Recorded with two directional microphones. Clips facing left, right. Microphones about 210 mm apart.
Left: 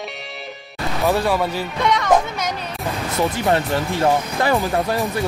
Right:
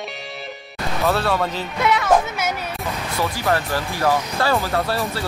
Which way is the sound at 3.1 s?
25° left (ahead or behind).